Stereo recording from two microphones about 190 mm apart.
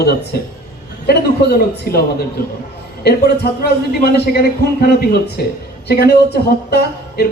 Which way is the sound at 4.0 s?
55° left (ahead or behind).